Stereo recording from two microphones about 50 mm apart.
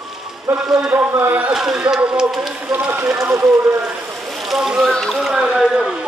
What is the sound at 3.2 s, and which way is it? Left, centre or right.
Speech, right.